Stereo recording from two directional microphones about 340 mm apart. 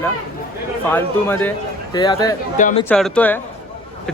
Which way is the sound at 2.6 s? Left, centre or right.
Left.